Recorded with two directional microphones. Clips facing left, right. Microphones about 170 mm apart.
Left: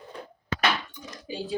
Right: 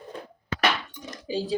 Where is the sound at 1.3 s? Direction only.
30° right (ahead or behind).